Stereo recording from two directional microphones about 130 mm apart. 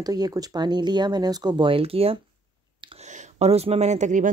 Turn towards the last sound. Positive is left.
turn(degrees=-75)  # may be behind; listen again after turning